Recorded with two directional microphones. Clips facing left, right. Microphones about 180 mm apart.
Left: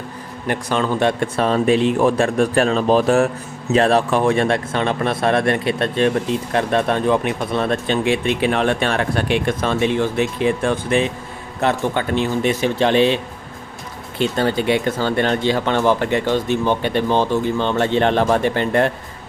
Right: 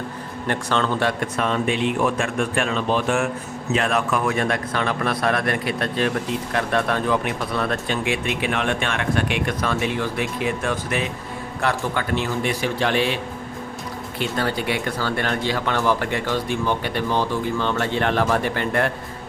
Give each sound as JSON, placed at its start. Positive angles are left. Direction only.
{"t": 0.4, "sound": "a man's voice", "side_deg": 10}
{"t": 14.2, "sound": "speech", "side_deg": 25}